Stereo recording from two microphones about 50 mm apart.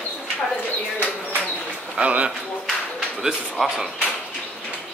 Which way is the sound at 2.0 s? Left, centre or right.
Right.